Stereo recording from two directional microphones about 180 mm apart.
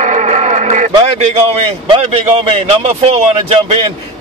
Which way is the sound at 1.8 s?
35° right (ahead or behind).